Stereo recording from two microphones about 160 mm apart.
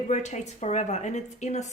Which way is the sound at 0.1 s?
45° left (ahead or behind).